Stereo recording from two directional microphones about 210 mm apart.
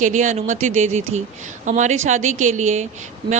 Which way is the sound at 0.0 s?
35° right (ahead or behind).